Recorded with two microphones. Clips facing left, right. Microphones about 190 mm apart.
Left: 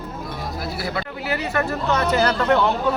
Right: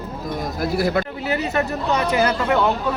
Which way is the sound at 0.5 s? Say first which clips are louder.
Right 8 dB; 50° right (ahead or behind).